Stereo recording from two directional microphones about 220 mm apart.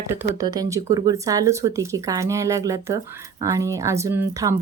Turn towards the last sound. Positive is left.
turn(degrees=-15)  # may be behind; listen again after turning